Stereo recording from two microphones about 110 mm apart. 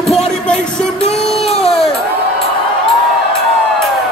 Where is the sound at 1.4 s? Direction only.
65° left (ahead or behind).